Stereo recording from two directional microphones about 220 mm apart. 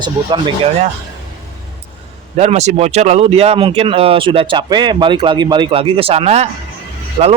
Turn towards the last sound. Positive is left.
turn(degrees=-25)  # may be behind; listen again after turning